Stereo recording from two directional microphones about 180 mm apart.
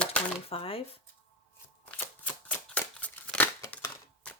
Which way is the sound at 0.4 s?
30° left (ahead or behind).